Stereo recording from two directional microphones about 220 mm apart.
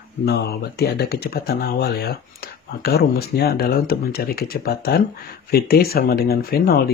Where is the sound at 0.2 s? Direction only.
50° left (ahead or behind).